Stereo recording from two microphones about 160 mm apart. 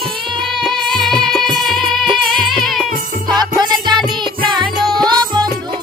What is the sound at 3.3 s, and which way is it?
Music, 25° right (ahead or behind).